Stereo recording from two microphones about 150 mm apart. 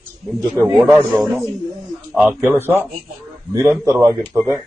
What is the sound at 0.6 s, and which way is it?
A man's voice, 10° right (ahead or behind).